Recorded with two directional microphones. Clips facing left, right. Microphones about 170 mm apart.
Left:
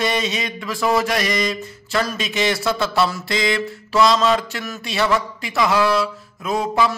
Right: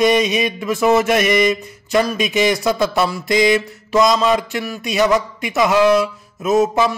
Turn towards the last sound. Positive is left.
turn(degrees=-20)  # may be behind; listen again after turning